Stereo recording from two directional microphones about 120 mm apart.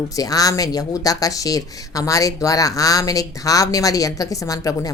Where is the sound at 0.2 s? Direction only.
30° left (ahead or behind).